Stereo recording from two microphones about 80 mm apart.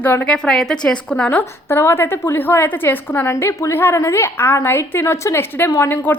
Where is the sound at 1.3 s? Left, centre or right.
Left.